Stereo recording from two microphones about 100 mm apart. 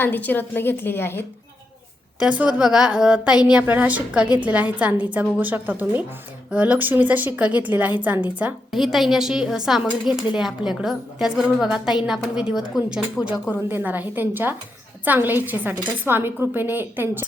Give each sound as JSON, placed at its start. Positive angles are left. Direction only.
{"t": 0.0, "sound": "a woman's voice", "side_deg": 20}
{"t": 2.1, "sound": "a woman's voice", "side_deg": -10}
{"t": 8.7, "sound": "a woman's voice", "side_deg": 0}
{"t": 13.7, "sound": "a woman's voice", "side_deg": -20}